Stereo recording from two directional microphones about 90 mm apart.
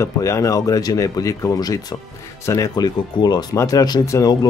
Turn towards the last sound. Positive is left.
turn(degrees=35)  # may be behind; listen again after turning